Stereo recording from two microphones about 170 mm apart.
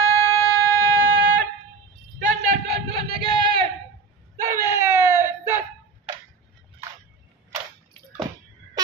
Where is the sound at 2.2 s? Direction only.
35° right (ahead or behind).